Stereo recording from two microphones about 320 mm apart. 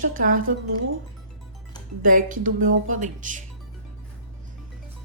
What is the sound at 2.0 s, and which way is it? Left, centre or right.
A woman's voice, right.